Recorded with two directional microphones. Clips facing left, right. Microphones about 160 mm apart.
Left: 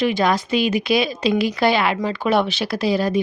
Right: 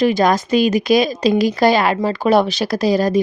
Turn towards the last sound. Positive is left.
turn(degrees=-40)  # may be behind; listen again after turning